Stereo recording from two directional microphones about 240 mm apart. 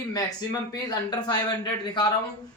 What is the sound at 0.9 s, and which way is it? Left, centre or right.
Speech, centre.